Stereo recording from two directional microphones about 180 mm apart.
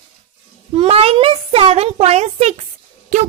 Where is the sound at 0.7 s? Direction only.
35° right (ahead or behind).